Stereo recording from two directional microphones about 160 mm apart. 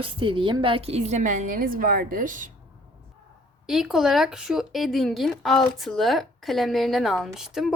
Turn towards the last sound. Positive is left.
turn(degrees=-5)  # may be behind; listen again after turning